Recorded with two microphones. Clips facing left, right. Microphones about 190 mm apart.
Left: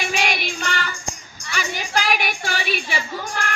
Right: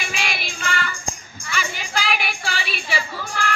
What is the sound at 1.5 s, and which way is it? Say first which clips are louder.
Music: left 1 dB; 40° left (ahead or behind).